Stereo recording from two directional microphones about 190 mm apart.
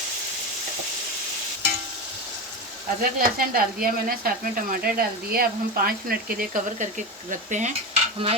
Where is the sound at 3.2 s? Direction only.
50° right (ahead or behind).